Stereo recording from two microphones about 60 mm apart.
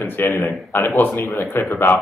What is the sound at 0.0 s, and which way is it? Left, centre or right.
A man's voice, left.